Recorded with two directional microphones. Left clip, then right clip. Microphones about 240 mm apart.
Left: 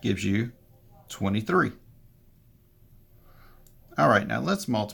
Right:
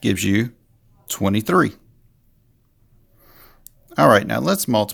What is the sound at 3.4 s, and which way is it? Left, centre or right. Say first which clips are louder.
Speech: right 7 dB; right.